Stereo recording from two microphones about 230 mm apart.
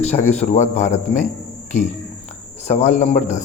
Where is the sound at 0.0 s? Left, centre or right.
Left.